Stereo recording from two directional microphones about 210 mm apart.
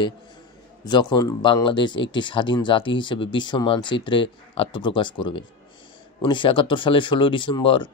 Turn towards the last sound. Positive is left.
turn(degrees=25)  # may be behind; listen again after turning